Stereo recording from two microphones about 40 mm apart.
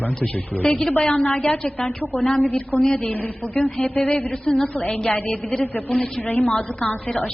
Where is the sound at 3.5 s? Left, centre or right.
Left.